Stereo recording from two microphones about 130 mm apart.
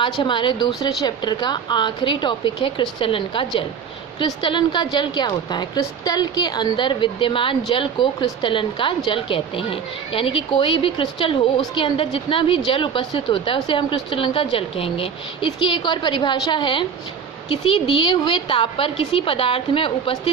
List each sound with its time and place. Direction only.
0.0 s a woman's voice: 40° left (ahead or behind)